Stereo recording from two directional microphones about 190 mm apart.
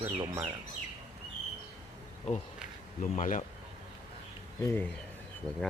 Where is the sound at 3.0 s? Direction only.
45° left (ahead or behind).